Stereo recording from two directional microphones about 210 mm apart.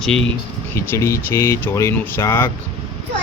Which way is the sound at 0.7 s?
15° left (ahead or behind).